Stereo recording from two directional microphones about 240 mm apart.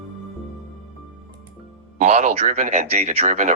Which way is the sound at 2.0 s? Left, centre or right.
Right.